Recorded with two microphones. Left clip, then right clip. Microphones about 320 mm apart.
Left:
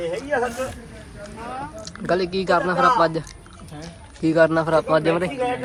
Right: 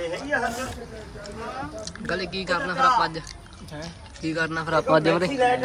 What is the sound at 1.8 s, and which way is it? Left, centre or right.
Speech, centre.